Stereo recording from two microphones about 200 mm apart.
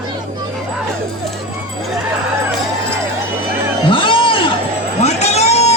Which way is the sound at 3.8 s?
25° left (ahead or behind).